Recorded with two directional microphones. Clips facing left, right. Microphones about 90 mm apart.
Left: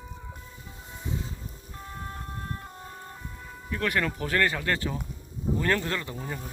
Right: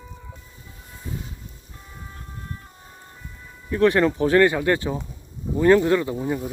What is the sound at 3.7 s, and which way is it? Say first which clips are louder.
Speech: right 10 dB; 30° right (ahead or behind).